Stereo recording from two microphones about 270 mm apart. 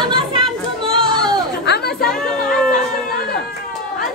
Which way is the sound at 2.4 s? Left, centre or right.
Centre.